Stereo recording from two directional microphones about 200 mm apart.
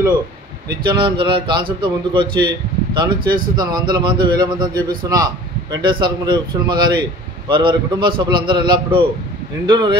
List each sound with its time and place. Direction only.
0.7 s a man's voice: 25° right (ahead or behind)